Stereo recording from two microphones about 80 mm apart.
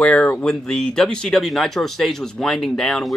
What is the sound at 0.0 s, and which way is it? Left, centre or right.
Speech, centre.